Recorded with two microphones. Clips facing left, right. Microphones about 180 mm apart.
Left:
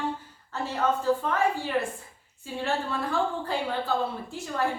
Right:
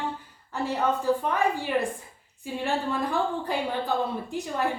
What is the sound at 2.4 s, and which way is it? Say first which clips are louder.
A woman's voice: right 1 dB; 15° right (ahead or behind).